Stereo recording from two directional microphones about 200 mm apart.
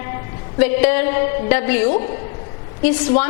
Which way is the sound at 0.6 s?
10° left (ahead or behind).